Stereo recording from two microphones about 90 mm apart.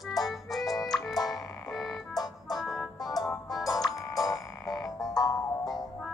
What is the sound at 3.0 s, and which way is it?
Music, 45° left (ahead or behind).